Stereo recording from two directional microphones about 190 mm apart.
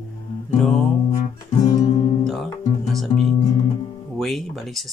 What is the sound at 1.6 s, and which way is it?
Music, 20° left (ahead or behind).